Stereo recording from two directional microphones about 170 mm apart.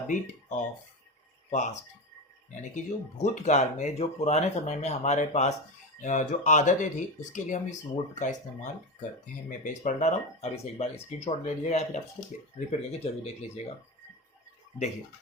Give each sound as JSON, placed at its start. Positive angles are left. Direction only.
{"t": 0.1, "sound": "speech", "side_deg": 45}